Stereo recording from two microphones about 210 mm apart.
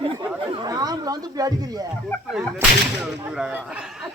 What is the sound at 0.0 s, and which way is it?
Chatter, 20° right (ahead or behind).